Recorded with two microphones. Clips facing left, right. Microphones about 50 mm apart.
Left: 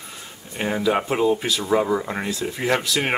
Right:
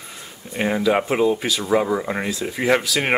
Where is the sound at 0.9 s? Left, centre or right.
Centre.